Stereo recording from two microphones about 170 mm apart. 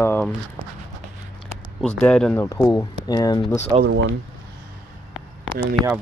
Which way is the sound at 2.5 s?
15° left (ahead or behind).